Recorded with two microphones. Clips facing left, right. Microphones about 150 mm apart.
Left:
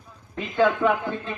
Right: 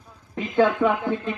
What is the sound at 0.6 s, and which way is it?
Speech, 15° right (ahead or behind).